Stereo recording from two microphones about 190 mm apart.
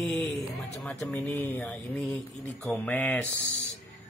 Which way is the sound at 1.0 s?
10° left (ahead or behind).